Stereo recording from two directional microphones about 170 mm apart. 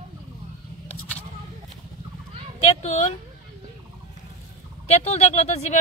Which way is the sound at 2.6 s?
40° left (ahead or behind).